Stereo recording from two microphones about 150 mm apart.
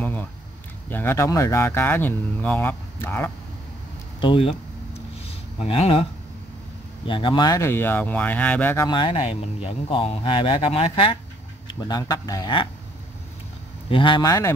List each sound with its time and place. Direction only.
0.0 s a sound: 15° left (ahead or behind)
0.8 s speech: 15° left (ahead or behind)
4.2 s speech: 35° left (ahead or behind)
5.6 s speech: 40° left (ahead or behind)
7.1 s speech: 35° left (ahead or behind); by 8.8 s 10° left (ahead or behind)
8.8 s speech: 30° left (ahead or behind)
11.6 s speech: 25° left (ahead or behind)
13.8 s speech: 35° left (ahead or behind)